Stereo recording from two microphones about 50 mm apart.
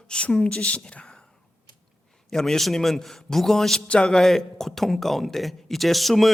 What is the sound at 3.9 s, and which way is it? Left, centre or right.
Speech, centre.